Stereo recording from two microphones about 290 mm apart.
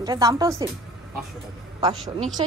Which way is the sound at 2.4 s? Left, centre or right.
Centre.